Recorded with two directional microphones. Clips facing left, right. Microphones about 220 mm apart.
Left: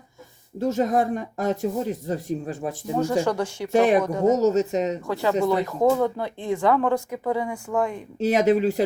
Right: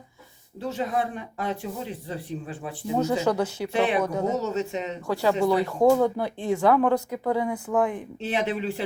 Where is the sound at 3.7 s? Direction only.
45° left (ahead or behind).